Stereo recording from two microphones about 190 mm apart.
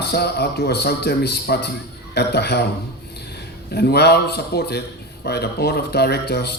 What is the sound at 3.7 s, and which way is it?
Speech, 60° left (ahead or behind).